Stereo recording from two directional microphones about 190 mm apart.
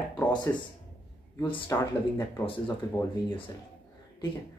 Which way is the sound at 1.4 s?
25° left (ahead or behind).